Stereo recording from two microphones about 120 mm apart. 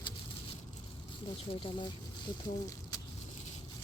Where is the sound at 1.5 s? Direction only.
50° left (ahead or behind).